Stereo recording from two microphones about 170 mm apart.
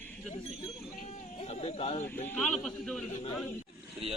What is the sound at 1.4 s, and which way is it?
Speech, 40° left (ahead or behind).